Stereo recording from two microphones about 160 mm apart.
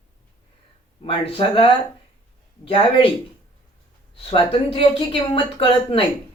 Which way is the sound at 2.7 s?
35° left (ahead or behind).